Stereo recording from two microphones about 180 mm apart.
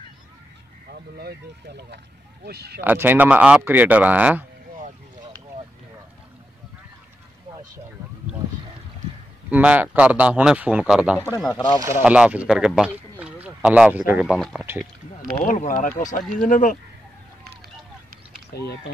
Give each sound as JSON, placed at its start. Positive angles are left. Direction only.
{"t": 2.4, "sound": "speech", "side_deg": -60}
{"t": 2.8, "sound": "a man's voice", "side_deg": -10}
{"t": 9.5, "sound": "a man's voice", "side_deg": -10}
{"t": 11.5, "sound": "speech", "side_deg": 25}
{"t": 12.0, "sound": "speech", "side_deg": -5}
{"t": 15.3, "sound": "speech", "side_deg": 45}